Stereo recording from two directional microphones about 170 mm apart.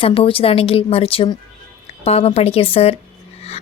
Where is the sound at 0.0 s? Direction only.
35° left (ahead or behind).